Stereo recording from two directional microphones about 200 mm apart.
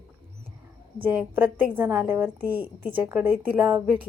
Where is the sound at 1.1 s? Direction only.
10° right (ahead or behind).